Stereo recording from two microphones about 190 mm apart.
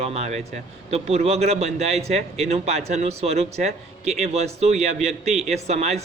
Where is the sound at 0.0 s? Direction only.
35° right (ahead or behind).